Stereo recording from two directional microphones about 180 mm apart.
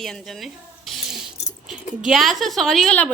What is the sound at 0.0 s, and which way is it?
Speech, centre (ahead or behind).